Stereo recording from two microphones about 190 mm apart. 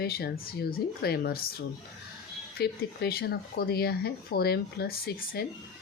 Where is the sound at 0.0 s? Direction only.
55° left (ahead or behind).